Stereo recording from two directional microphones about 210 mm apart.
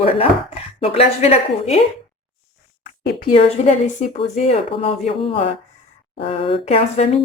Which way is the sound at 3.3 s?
35° left (ahead or behind).